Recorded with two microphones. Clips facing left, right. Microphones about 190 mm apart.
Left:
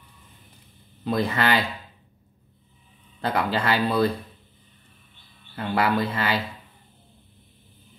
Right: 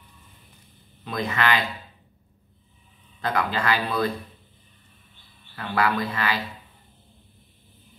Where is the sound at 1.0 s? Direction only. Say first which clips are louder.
Left 2 dB; 35° left (ahead or behind).